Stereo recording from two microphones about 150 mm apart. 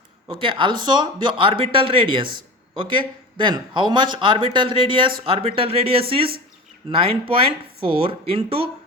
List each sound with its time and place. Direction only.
0.3 s a man's voice: 35° right (ahead or behind)